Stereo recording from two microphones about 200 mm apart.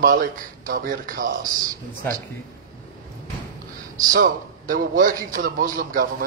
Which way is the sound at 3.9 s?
40° right (ahead or behind).